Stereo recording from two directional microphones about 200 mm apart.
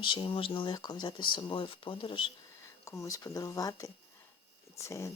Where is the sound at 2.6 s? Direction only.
15° left (ahead or behind).